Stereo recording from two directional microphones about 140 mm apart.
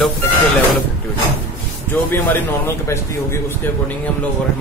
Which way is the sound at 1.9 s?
15° left (ahead or behind).